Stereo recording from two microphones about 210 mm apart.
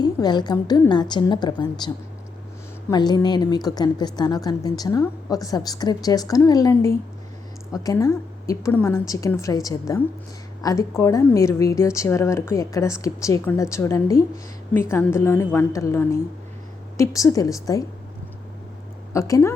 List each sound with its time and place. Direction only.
0.0 s a woman's voice: 20° left (ahead or behind)
2.9 s a woman's voice: 20° left (ahead or behind)
19.1 s a woman's voice: 15° left (ahead or behind)